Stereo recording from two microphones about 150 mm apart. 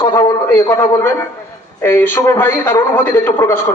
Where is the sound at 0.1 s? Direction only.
20° left (ahead or behind).